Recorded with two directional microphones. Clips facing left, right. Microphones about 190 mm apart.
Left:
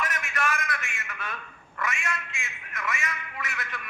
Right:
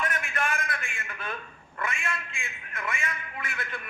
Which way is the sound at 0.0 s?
30° right (ahead or behind).